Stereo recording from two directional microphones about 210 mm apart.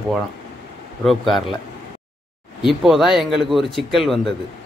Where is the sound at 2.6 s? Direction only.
Centre (ahead or behind).